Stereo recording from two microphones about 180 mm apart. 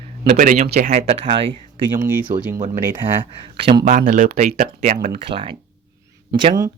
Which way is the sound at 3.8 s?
45° right (ahead or behind).